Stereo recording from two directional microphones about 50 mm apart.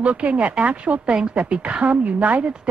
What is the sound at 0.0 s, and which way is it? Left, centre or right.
Speech, right.